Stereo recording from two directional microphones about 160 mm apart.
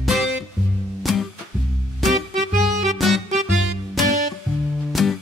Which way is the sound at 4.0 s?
Centre (ahead or behind).